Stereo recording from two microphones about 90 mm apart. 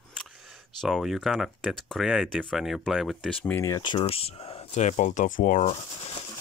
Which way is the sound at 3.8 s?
65° left (ahead or behind).